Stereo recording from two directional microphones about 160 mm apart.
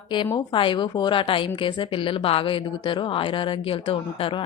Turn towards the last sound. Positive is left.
turn(degrees=35)  # may be behind; listen again after turning